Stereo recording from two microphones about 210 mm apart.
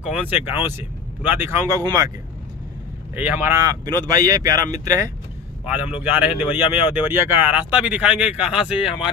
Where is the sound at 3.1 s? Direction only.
10° right (ahead or behind).